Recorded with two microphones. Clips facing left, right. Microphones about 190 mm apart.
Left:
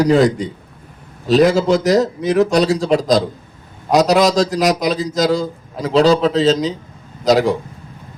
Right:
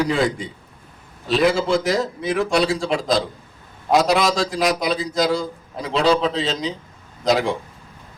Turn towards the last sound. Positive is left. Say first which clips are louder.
# left 5 dB
turn(degrees=40)  # may be behind; listen again after turning